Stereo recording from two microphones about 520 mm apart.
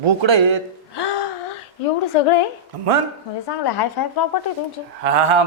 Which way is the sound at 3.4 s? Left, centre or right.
Left.